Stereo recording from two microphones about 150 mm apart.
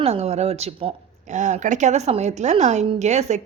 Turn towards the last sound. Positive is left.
turn(degrees=-50)  # may be behind; listen again after turning